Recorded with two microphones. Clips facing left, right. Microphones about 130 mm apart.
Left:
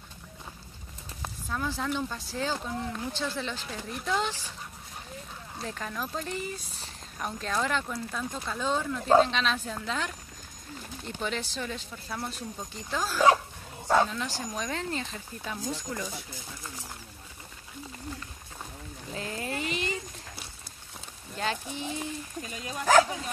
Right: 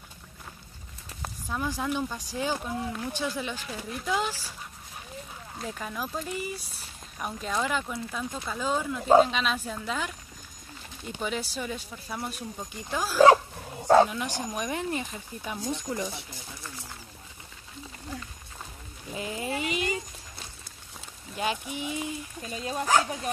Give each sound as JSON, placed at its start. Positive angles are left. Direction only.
{"t": 1.2, "sound": "speech", "side_deg": -10}
{"t": 5.6, "sound": "speech", "side_deg": -10}
{"t": 19.1, "sound": "speech", "side_deg": -10}
{"t": 21.4, "sound": "speech", "side_deg": -15}
{"t": 22.6, "sound": "speech", "side_deg": -35}